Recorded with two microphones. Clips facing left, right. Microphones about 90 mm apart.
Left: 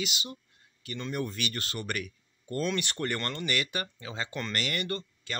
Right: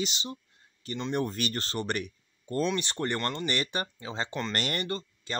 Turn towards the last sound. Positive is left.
turn(degrees=-25)  # may be behind; listen again after turning